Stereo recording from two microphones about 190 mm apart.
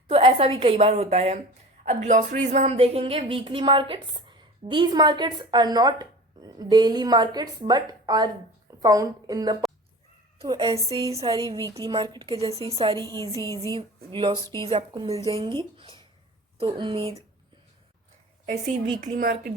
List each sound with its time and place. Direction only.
0.1 s a woman's voice: 30° right (ahead or behind)
18.9 s a woman's voice: 45° right (ahead or behind)